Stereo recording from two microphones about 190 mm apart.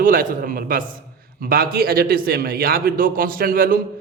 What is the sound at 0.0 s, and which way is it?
A man's voice, 50° right (ahead or behind).